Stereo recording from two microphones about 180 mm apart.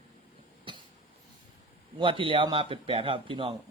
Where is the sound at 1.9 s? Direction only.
30° right (ahead or behind).